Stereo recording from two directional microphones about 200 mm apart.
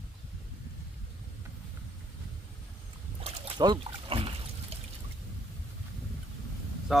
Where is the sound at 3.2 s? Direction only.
30° right (ahead or behind).